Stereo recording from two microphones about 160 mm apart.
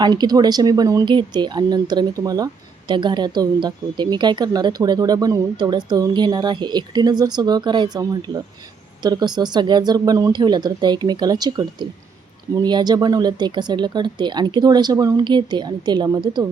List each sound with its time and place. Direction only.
0.0 s speech: 25° right (ahead or behind)